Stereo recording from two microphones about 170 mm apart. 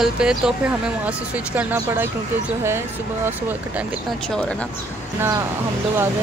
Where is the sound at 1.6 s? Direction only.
10° right (ahead or behind).